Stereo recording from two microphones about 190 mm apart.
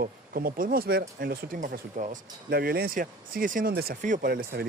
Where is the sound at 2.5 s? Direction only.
55° right (ahead or behind).